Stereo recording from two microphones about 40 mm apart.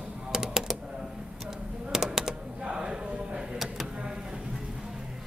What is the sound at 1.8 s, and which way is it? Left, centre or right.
Typing, centre.